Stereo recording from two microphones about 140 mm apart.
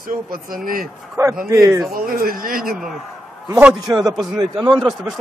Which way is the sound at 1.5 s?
25° right (ahead or behind).